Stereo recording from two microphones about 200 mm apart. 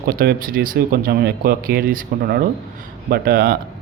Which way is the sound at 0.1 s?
45° right (ahead or behind).